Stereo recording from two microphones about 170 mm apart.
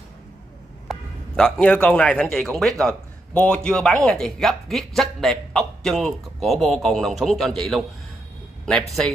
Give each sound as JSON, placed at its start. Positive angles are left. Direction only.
{"t": 0.8, "sound": "a man's voice", "side_deg": 5}